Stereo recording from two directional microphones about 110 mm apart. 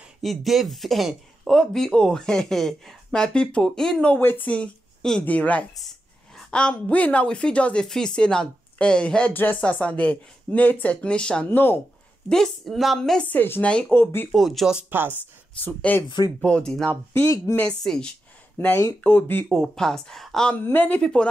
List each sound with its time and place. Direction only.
0.2 s a woman's voice: centre (ahead or behind)
11.5 s speech: 20° left (ahead or behind)
12.3 s speech: 5° left (ahead or behind)
13.3 s a woman's voice: 15° left (ahead or behind)
14.3 s speech: centre (ahead or behind)
14.8 s speech: 20° right (ahead or behind)
15.6 s a woman's voice: 15° left (ahead or behind)
17.1 s speech: 20° left (ahead or behind)
17.6 s a woman's voice: 5° left (ahead or behind)
18.6 s a woman's voice: 25° left (ahead or behind)
19.5 s speech: centre (ahead or behind)
20.6 s a woman's voice: 15° left (ahead or behind)
21.0 s speech: 5° left (ahead or behind)